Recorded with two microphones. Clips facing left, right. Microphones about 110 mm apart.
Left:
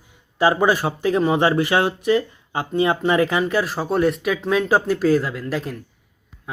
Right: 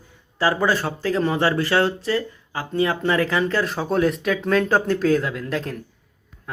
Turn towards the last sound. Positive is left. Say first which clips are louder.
# even
turn(degrees=5)  # may be behind; listen again after turning